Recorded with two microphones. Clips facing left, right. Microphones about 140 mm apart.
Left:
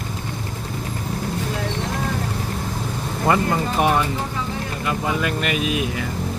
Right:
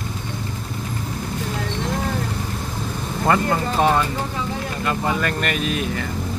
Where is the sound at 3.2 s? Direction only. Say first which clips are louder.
Even; 15° left (ahead or behind).